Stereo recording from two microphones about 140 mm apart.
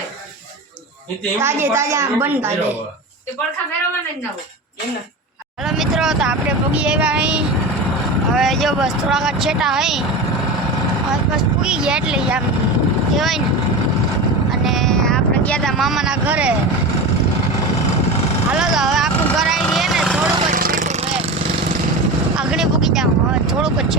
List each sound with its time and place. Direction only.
1.4 s a woman's voice: 15° right (ahead or behind)
5.6 s a woman's voice: 5° right (ahead or behind)
11.6 s a woman's voice: 5° right (ahead or behind)
14.6 s a sound: centre (ahead or behind)
18.5 s speech: 5° right (ahead or behind)
19.5 s vehicle: centre (ahead or behind)
20.5 s vehicle: 80° right; by 21.2 s 50° right (ahead or behind)
22.4 s vehicle: 5° right (ahead or behind)
23.5 s speech: 5° right (ahead or behind)